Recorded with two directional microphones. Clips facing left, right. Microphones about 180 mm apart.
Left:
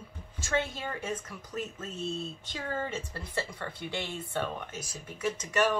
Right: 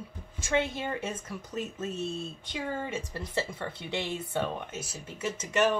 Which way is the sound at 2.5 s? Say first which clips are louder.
Right 1 dB; 15° right (ahead or behind).